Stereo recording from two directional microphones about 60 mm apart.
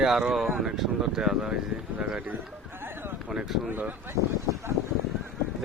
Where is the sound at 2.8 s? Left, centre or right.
Right.